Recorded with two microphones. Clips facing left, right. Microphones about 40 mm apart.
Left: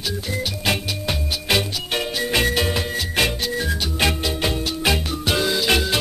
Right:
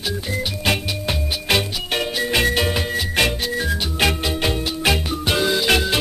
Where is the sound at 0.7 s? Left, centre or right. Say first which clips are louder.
Right 2 dB; centre.